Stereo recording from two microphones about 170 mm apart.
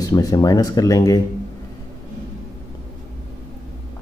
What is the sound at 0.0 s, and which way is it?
Speech, 20° left (ahead or behind).